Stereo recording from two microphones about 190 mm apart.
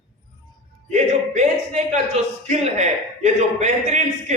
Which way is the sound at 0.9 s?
40° right (ahead or behind).